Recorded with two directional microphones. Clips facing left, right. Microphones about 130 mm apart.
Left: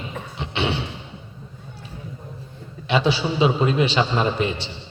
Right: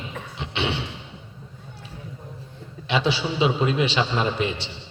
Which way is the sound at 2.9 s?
40° left (ahead or behind).